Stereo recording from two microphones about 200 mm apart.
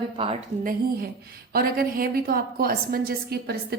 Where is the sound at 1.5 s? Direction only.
50° right (ahead or behind).